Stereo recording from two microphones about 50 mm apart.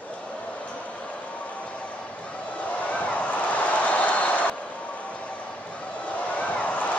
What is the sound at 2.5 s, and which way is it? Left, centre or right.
Vehicle, left.